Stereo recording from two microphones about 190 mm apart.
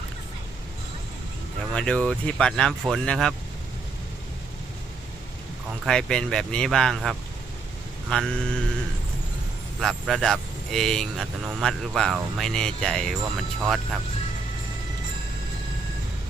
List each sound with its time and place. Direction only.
1.7 s speech: 5° left (ahead or behind)
5.8 s speech: 5° left (ahead or behind)
9.8 s speech: centre (ahead or behind)